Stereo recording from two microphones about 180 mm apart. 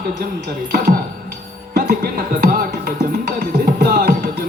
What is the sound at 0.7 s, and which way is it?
Music, 55° right (ahead or behind).